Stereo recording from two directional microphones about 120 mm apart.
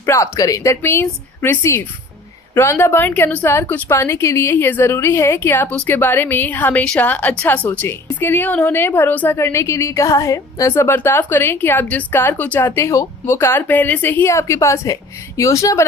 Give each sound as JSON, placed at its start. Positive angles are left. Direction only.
{"t": 0.0, "sound": "a woman's voice", "side_deg": 25}